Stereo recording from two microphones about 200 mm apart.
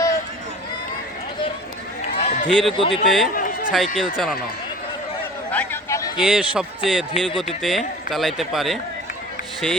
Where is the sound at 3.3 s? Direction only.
45° left (ahead or behind).